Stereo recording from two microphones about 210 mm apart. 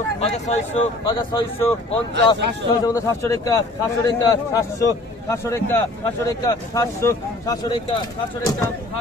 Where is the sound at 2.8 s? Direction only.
15° left (ahead or behind).